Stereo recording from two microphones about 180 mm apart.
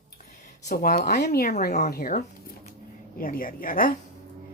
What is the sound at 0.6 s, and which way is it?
Speech, 55° left (ahead or behind).